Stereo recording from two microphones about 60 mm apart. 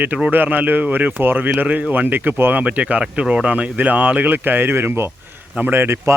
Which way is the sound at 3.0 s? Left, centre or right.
Centre.